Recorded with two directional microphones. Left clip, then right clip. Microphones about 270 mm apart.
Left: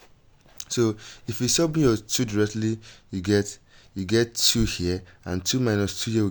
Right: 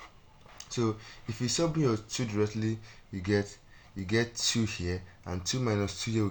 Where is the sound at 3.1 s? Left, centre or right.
Left.